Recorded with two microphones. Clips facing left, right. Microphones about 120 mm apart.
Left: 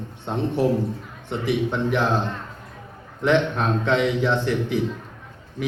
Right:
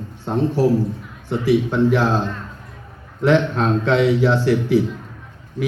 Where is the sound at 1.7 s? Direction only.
20° left (ahead or behind).